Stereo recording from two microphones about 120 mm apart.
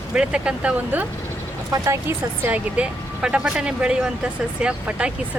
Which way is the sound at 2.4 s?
10° right (ahead or behind).